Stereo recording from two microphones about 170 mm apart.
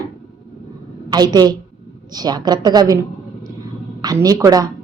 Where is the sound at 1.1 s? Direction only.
25° right (ahead or behind).